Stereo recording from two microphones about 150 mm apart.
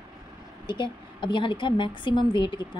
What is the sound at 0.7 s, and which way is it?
A woman's voice, 30° left (ahead or behind).